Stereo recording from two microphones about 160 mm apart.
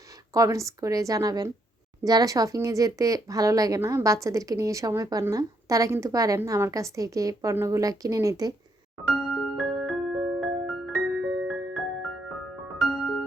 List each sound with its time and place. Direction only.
0.3 s speech: 20° right (ahead or behind)
9.6 s music: centre (ahead or behind)